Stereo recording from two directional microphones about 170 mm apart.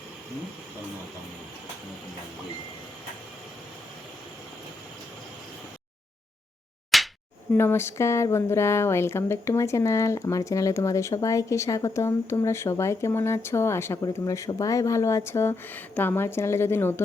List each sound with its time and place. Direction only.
6.9 s slap: centre (ahead or behind)
7.5 s speech: 15° left (ahead or behind)